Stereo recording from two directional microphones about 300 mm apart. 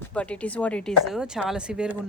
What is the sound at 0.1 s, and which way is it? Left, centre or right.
A woman's voice, centre.